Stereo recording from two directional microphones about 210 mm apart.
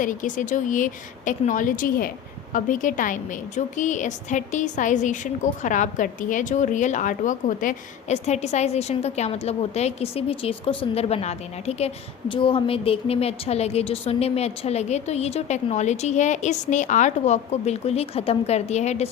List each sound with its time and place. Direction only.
0.0 s a woman's voice: 40° left (ahead or behind)